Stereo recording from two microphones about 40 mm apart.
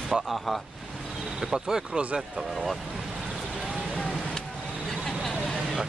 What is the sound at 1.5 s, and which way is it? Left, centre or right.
Speech, centre.